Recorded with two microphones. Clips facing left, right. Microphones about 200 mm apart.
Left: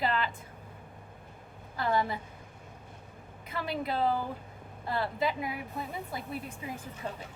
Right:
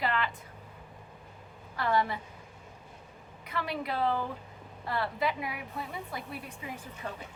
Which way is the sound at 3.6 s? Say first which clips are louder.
Left 1 dB; 25° left (ahead or behind).